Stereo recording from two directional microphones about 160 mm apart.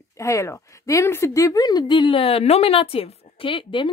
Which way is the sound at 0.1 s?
20° left (ahead or behind).